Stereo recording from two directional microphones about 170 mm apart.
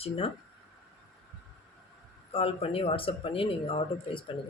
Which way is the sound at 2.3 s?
35° left (ahead or behind).